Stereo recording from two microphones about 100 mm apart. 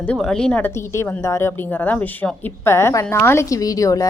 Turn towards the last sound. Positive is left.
turn(degrees=35)  # may be behind; listen again after turning